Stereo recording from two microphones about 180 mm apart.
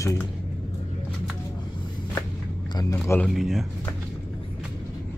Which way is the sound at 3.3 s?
Centre (ahead or behind).